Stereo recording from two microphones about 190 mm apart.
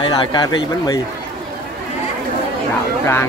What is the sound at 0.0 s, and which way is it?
Speech, 25° left (ahead or behind).